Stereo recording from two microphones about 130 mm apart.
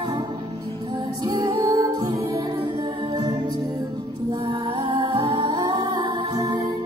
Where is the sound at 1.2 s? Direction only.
30° right (ahead or behind).